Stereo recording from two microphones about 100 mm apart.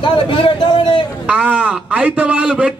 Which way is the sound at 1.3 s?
10° right (ahead or behind).